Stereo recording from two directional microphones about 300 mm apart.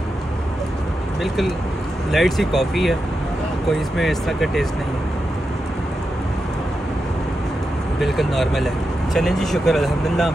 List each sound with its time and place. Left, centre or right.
1.2 s speech: centre
8.0 s speech: centre